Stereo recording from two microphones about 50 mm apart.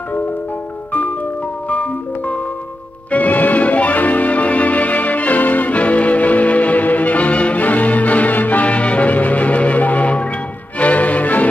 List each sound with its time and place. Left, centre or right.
1.7 s music: left